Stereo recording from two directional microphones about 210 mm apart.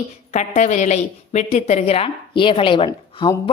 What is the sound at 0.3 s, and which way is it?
A woman's voice, 35° left (ahead or behind).